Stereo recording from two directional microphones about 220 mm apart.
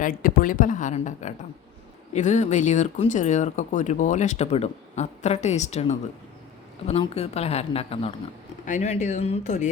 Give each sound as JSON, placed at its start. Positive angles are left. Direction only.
{"t": 0.0, "sound": "speech", "side_deg": 40}